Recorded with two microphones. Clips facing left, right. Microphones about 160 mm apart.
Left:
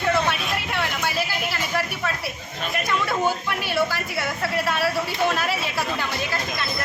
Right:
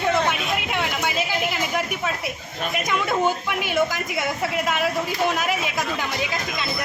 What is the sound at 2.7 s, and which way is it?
Speech, 15° right (ahead or behind).